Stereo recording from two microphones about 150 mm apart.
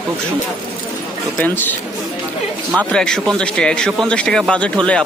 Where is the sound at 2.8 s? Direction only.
5° left (ahead or behind).